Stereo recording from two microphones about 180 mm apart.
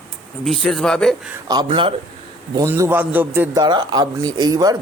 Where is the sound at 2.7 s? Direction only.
15° right (ahead or behind).